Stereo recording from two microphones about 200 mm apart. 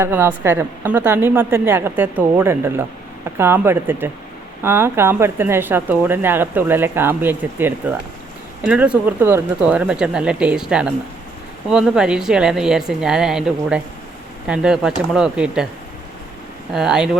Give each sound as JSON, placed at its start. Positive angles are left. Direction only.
{"t": 0.0, "sound": "speech", "side_deg": -10}
{"t": 16.7, "sound": "speech", "side_deg": 0}